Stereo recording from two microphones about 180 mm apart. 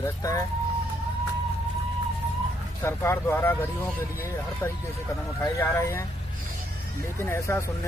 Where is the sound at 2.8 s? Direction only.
15° left (ahead or behind).